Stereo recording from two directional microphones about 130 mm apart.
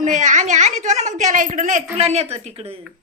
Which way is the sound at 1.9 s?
55° right (ahead or behind).